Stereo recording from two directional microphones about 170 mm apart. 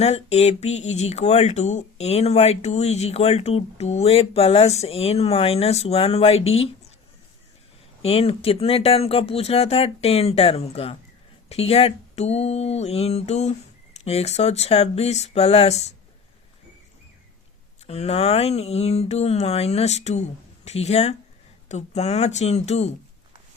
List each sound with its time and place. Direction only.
0.0 s speech: 40° left (ahead or behind)
8.0 s speech: 35° left (ahead or behind)
17.8 s speech: 40° left (ahead or behind)